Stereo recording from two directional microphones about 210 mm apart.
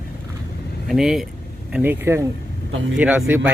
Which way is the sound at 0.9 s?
Centre (ahead or behind).